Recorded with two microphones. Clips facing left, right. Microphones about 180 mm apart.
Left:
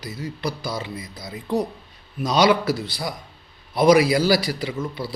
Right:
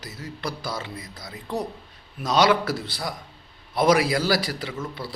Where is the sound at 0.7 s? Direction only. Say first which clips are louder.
Left 3 dB; 20° left (ahead or behind).